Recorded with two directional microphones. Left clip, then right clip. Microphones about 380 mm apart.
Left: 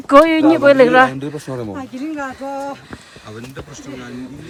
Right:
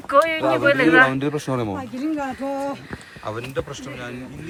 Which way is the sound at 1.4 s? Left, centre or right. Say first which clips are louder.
Right 2 dB; right.